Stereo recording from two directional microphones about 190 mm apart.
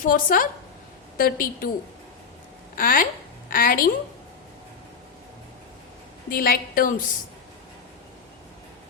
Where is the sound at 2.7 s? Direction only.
45° left (ahead or behind).